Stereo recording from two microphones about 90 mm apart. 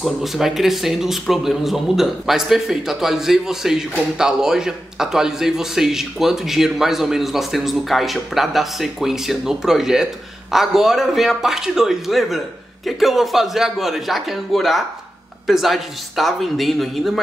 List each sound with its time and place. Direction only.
0.0 s speech: centre (ahead or behind)